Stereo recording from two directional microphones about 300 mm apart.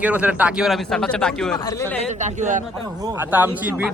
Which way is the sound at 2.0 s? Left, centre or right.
Right.